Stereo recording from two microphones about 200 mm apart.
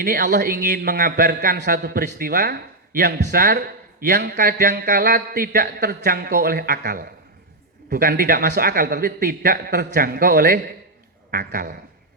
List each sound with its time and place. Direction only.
0.0 s a man's voice: 50° right (ahead or behind)